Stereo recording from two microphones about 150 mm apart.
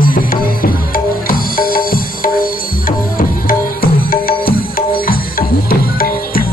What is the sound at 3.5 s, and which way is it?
Music, 80° left.